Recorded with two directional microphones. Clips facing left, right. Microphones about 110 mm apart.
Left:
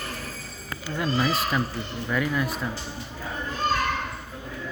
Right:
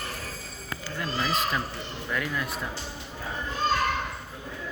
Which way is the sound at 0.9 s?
15° left (ahead or behind).